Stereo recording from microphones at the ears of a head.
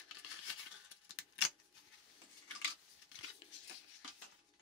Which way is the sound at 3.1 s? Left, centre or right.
Left.